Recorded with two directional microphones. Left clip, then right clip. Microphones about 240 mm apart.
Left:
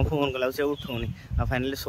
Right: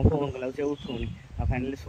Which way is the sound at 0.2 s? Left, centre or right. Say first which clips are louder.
Left 4 dB; centre.